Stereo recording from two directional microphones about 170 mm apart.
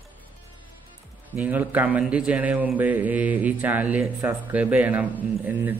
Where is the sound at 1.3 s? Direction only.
10° right (ahead or behind).